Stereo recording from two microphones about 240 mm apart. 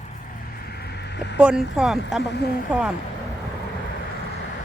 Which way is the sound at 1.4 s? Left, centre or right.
Centre.